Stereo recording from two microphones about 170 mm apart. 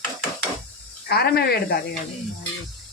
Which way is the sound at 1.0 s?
70° left (ahead or behind).